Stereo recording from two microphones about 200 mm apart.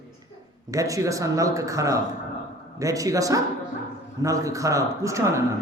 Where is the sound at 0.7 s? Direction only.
15° right (ahead or behind).